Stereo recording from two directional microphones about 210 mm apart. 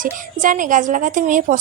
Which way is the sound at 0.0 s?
40° right (ahead or behind).